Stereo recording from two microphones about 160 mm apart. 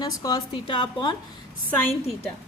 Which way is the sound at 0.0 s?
25° left (ahead or behind).